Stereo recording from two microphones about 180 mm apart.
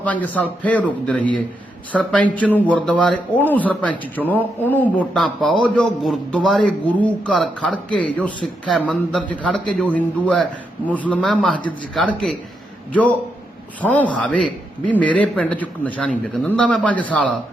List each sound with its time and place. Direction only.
0.0 s a man's voice: 10° left (ahead or behind)